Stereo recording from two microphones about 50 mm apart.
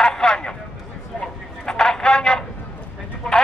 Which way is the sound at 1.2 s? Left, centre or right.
Centre.